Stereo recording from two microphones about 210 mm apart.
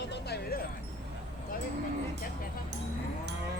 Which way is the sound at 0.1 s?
50° left (ahead or behind).